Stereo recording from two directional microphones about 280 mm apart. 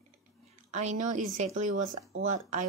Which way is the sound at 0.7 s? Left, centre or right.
Right.